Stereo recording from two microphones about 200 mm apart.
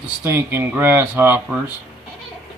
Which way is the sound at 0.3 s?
10° right (ahead or behind).